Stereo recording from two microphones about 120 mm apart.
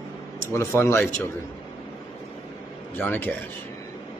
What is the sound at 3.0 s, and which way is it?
Speech, 15° left (ahead or behind).